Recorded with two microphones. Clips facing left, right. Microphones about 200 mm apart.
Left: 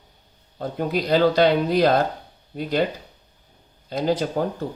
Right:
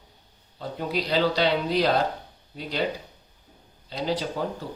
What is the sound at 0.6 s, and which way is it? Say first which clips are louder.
Speech: left 5 dB; 50° left (ahead or behind).